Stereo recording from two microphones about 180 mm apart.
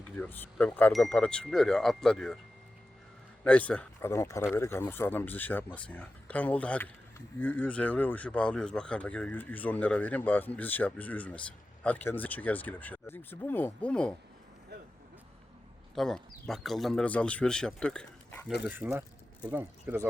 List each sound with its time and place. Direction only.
0.2 s speech: 10° left (ahead or behind)
3.4 s speech: 5° left (ahead or behind)
14.7 s vehicle: 65° right (ahead or behind)
16.0 s speech: centre (ahead or behind)
18.7 s speech: 10° right (ahead or behind)